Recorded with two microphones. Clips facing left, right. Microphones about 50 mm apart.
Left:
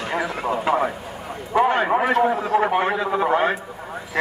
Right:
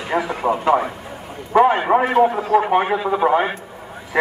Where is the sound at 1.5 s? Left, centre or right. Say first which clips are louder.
Right 4 dB; centre.